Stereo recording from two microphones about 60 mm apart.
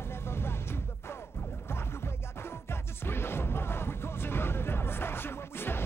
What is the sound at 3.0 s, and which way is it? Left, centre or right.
Music, left.